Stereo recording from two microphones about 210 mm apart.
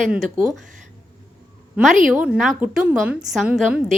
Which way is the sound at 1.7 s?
Centre (ahead or behind).